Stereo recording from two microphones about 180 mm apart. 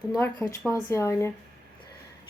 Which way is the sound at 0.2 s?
15° left (ahead or behind).